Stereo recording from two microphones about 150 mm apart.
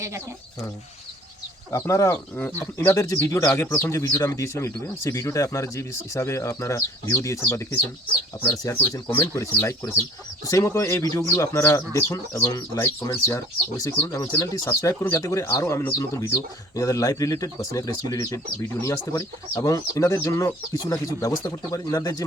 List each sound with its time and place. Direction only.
1.7 s speech: 20° left (ahead or behind)